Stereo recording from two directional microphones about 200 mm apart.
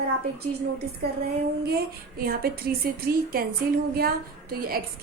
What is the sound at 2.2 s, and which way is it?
Speech, 50° right (ahead or behind).